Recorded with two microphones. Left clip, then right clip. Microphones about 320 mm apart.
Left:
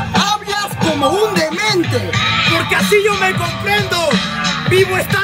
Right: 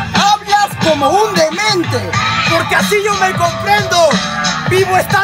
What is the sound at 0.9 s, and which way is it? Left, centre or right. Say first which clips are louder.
Music: right 3 dB; right.